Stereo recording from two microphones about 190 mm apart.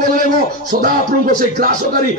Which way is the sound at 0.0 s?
45° right (ahead or behind).